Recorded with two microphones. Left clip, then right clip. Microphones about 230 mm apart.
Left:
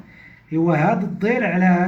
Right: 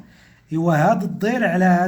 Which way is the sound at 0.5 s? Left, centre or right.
Right.